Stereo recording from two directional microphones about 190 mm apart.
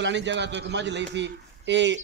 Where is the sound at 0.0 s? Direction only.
70° right (ahead or behind).